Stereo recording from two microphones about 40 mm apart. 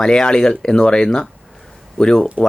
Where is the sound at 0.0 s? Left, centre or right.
Centre.